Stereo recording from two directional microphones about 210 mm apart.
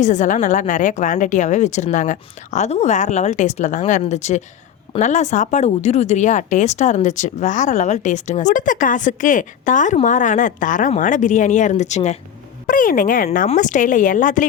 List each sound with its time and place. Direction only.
0.0 s speech: 35° left (ahead or behind)